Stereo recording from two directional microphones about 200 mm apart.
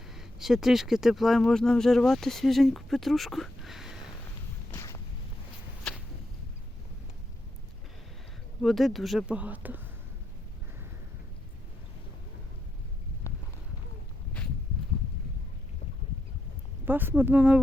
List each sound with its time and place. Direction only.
0.1 s speech: centre (ahead or behind)
4.7 s a sound: 15° left (ahead or behind)
5.9 s whip: 5° left (ahead or behind)
8.6 s speech: centre (ahead or behind)
16.8 s speech: 10° right (ahead or behind)